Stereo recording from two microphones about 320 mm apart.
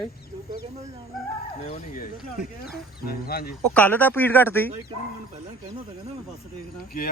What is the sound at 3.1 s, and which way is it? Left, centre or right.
Speech, left.